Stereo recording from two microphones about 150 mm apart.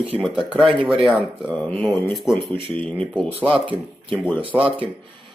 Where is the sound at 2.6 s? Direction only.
40° right (ahead or behind).